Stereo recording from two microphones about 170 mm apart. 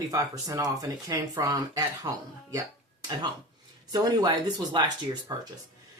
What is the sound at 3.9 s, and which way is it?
Speech, 20° right (ahead or behind).